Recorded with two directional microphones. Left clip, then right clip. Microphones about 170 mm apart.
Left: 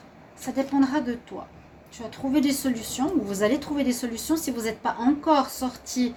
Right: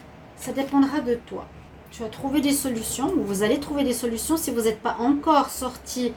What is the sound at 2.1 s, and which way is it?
A woman's voice, 45° left (ahead or behind).